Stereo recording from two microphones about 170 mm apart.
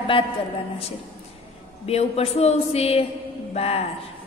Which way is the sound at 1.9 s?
35° left (ahead or behind).